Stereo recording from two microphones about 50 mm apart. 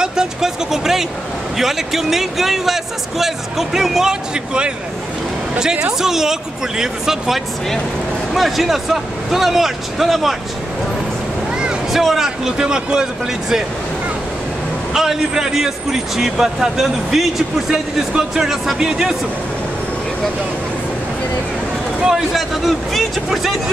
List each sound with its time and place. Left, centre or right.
0.0 s vehicle: centre
1.6 s speech: centre
11.9 s speech: centre
15.0 s speech: centre
22.0 s speech: centre